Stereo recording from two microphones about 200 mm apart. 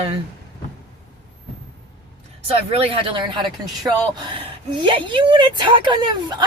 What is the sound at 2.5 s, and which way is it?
Speech, 30° right (ahead or behind).